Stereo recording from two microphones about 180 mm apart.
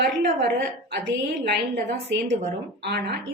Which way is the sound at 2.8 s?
65° right (ahead or behind).